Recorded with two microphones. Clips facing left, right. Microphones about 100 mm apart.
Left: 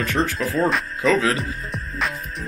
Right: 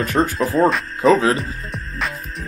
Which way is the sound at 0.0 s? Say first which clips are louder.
Right 4 dB; 40° right (ahead or behind).